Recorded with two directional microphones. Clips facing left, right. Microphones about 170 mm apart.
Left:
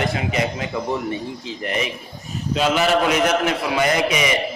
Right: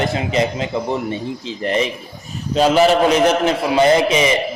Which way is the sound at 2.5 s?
35° right (ahead or behind).